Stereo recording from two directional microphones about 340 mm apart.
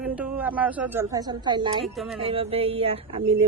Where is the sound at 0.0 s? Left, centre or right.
Centre.